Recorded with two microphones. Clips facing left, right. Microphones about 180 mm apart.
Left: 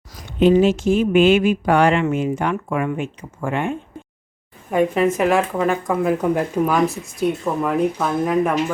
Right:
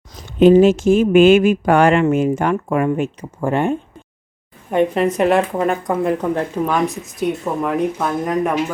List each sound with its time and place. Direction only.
0.3 s speech: 45° right (ahead or behind)
5.0 s speech: 35° right (ahead or behind)
5.5 s speech: 20° right (ahead or behind)
5.9 s speech: 5° left (ahead or behind)